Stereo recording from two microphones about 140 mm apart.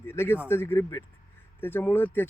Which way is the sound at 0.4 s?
15° left (ahead or behind).